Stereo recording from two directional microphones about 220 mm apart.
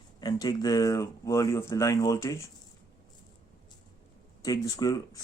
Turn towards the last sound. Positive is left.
turn(degrees=15)  # may be behind; listen again after turning